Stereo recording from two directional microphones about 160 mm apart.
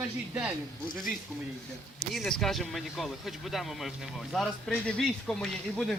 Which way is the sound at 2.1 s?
Centre (ahead or behind).